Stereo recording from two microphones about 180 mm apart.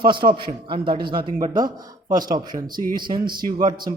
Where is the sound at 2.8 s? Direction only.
50° right (ahead or behind).